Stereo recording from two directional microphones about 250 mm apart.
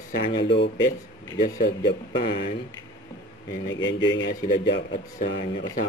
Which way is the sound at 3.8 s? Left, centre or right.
Left.